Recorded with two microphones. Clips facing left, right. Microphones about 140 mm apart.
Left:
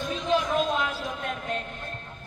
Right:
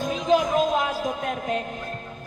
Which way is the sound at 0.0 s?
45° right (ahead or behind).